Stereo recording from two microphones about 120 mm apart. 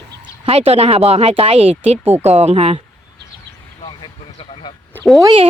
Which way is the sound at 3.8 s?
45° left (ahead or behind).